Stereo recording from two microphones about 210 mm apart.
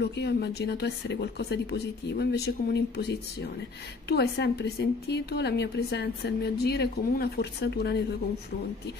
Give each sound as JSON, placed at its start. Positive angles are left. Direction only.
{"t": 0.0, "sound": "a woman's voice", "side_deg": 50}